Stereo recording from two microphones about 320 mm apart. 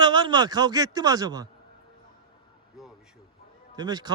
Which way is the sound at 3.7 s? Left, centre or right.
Centre.